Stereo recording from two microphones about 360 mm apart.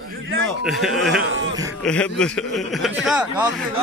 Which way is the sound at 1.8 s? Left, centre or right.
Centre.